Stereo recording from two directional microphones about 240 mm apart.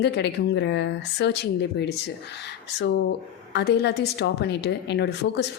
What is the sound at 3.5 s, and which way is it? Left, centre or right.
A woman's voice, left.